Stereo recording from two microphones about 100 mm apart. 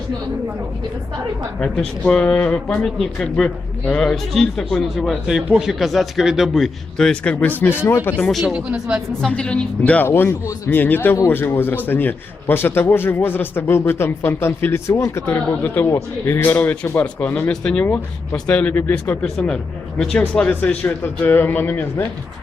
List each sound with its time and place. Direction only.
1.5 s a man's voice: 10° left (ahead or behind)
8.2 s speech: centre (ahead or behind)
8.5 s speech: 10° right (ahead or behind)
9.3 s speech: 10° left (ahead or behind)
10.1 s a man's voice: 25° left (ahead or behind)
17.5 s a man's voice: 10° left (ahead or behind)
19.2 s a man's voice: 10° left (ahead or behind)